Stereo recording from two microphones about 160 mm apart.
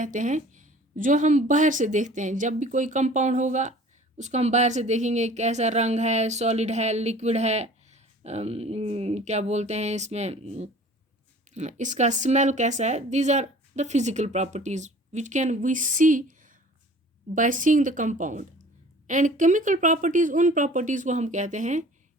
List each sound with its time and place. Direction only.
0.0 s speech: 50° right (ahead or behind)